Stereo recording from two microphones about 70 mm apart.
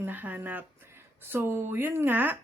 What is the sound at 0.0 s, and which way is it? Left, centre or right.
Speech, right.